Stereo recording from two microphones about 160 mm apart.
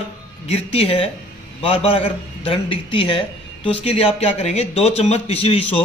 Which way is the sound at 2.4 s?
35° left (ahead or behind).